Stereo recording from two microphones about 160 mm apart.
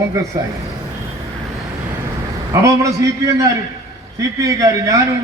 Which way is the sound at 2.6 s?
20° right (ahead or behind).